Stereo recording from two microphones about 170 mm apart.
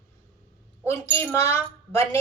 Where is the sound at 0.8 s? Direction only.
15° left (ahead or behind).